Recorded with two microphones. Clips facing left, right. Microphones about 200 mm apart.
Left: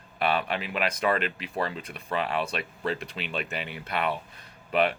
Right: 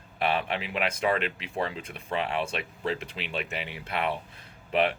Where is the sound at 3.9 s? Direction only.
25° right (ahead or behind).